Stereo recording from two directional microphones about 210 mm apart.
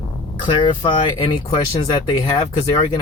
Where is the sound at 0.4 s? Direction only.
25° left (ahead or behind).